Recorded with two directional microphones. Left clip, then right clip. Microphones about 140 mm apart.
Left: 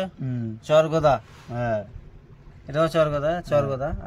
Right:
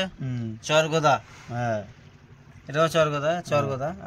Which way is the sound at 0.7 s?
85° left.